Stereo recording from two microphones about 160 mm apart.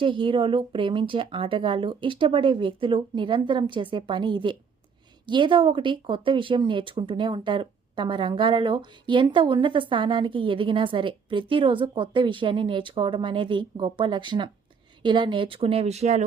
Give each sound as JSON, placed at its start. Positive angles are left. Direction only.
{"t": 0.0, "sound": "speech", "side_deg": -30}